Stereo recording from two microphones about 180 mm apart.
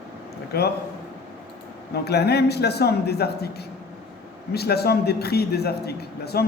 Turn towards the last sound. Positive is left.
turn(degrees=60)  # may be behind; listen again after turning